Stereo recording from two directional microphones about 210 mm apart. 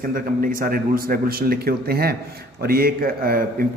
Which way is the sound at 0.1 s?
40° right (ahead or behind).